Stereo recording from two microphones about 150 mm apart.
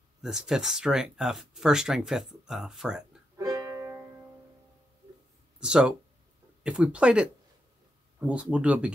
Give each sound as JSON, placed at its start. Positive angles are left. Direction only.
{"t": 0.2, "sound": "speech", "side_deg": -5}
{"t": 3.3, "sound": "music", "side_deg": -20}
{"t": 5.6, "sound": "speech", "side_deg": -5}